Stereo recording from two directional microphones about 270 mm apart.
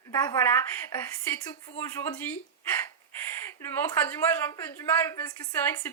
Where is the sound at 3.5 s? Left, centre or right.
Centre.